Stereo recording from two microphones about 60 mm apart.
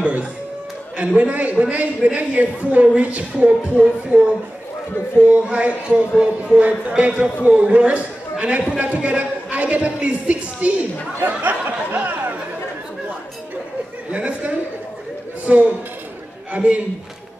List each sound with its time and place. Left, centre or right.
0.0 s speech: right
5.2 s speech: right
14.1 s speech: right